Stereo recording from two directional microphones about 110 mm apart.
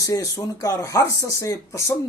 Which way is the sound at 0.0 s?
30° left (ahead or behind).